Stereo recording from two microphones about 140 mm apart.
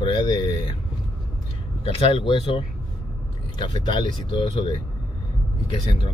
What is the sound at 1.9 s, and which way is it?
Speech, 40° left (ahead or behind).